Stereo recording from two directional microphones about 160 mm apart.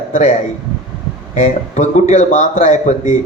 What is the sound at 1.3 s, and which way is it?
A man's voice, 45° left (ahead or behind).